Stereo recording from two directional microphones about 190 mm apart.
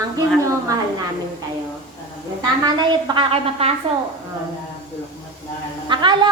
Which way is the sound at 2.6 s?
20° right (ahead or behind).